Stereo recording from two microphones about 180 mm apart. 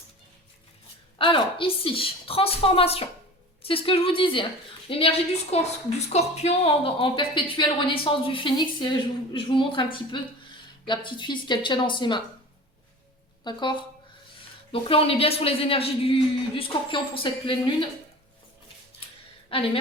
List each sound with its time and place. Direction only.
1.2 s a woman's voice: 30° left (ahead or behind)
13.4 s a woman's voice: 25° left (ahead or behind)
19.5 s speech: 30° left (ahead or behind)